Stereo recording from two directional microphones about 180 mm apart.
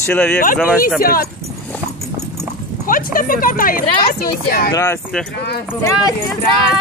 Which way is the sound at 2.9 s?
50° left (ahead or behind).